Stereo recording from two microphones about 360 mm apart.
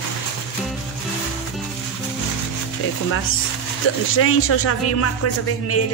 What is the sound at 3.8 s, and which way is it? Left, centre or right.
Speech, left.